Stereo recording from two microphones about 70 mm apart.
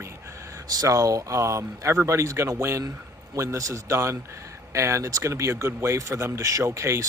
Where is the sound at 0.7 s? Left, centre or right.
Right.